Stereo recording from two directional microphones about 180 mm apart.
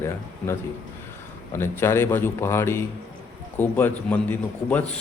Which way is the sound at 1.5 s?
15° left (ahead or behind).